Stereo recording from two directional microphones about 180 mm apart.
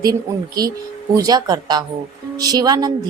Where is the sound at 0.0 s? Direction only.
20° right (ahead or behind).